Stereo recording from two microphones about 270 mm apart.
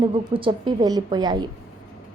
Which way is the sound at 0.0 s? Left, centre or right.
Centre.